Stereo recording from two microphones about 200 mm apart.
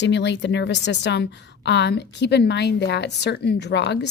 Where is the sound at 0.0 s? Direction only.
60° left (ahead or behind).